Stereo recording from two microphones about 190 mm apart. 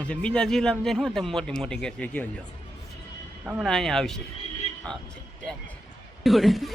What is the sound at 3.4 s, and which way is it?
Speech, 10° right (ahead or behind).